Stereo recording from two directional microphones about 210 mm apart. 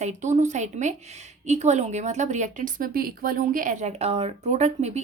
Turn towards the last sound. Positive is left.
turn(degrees=-30)  # may be behind; listen again after turning